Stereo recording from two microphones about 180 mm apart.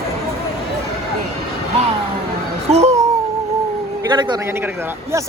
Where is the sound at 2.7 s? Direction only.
35° right (ahead or behind).